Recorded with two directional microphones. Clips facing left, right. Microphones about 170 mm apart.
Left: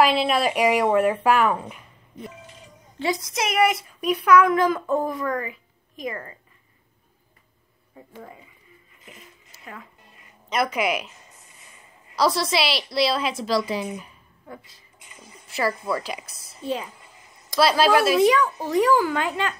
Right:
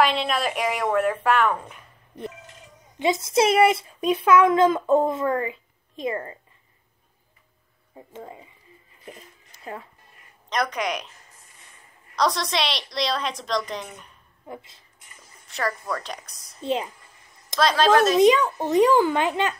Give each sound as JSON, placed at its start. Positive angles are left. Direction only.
{"t": 0.2, "sound": "speech", "side_deg": 5}
{"t": 3.0, "sound": "speech", "side_deg": -25}
{"t": 8.1, "sound": "speech", "side_deg": -25}
{"t": 9.5, "sound": "music", "side_deg": 5}
{"t": 10.5, "sound": "a woman's voice", "side_deg": 5}
{"t": 12.2, "sound": "a woman's voice", "side_deg": 5}
{"t": 14.5, "sound": "speech", "side_deg": -25}
{"t": 15.4, "sound": "a sound", "side_deg": 5}
{"t": 15.9, "sound": "a woman's voice", "side_deg": 5}
{"t": 16.6, "sound": "speech", "side_deg": -25}
{"t": 17.6, "sound": "speech", "side_deg": 5}
{"t": 18.2, "sound": "speech", "side_deg": -20}